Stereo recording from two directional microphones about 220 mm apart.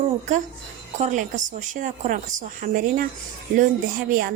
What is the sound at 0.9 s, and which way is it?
Speech, 35° right (ahead or behind).